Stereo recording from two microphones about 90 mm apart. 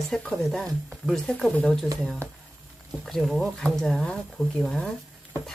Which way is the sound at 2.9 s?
5° left (ahead or behind).